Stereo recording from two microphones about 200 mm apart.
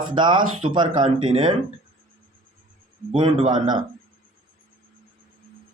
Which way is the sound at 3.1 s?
25° right (ahead or behind).